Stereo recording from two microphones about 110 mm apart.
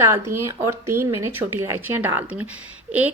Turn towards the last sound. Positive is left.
turn(degrees=-15)  # may be behind; listen again after turning